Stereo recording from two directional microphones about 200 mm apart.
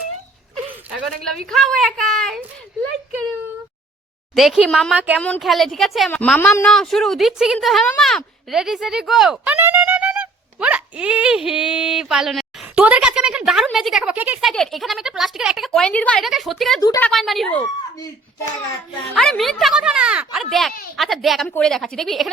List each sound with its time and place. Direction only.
0.9 s a woman's voice: centre (ahead or behind)
4.4 s a woman's voice: 5° right (ahead or behind)
5.2 s a woman's voice: 5° left (ahead or behind)
19.1 s a woman's voice: centre (ahead or behind)